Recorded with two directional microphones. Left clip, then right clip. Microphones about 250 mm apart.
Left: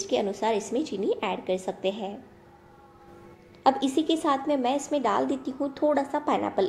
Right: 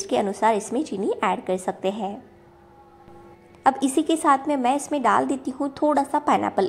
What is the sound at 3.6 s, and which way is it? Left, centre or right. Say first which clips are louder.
A woman's voice: right 3 dB; right.